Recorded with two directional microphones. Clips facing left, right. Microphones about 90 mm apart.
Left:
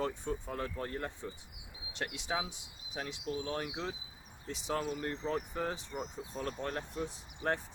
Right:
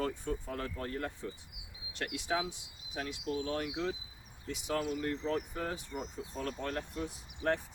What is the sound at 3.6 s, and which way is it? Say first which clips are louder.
Speech: right 3 dB; 35° left (ahead or behind).